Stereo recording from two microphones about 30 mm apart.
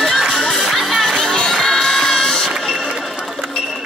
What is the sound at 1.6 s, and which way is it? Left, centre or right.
Music, centre.